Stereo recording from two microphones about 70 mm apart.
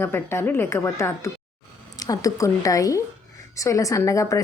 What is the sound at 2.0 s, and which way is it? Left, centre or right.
A woman's voice, left.